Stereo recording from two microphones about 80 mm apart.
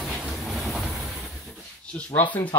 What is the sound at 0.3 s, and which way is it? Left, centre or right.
Train, centre.